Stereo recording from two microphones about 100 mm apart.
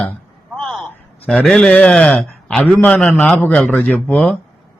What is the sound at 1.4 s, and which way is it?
A man's voice, 5° left (ahead or behind).